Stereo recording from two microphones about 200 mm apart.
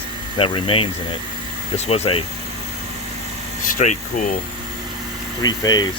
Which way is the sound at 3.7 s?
40° left (ahead or behind).